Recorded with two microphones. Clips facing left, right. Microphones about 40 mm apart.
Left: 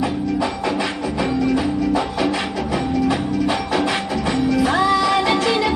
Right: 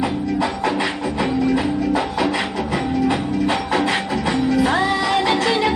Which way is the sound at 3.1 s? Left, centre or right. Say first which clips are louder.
Even; right.